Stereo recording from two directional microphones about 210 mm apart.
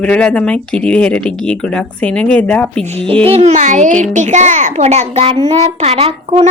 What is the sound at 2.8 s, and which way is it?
A child's voice, 30° right (ahead or behind).